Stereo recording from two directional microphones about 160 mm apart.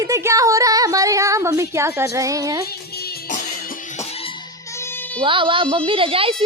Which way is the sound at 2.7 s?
75° left (ahead or behind).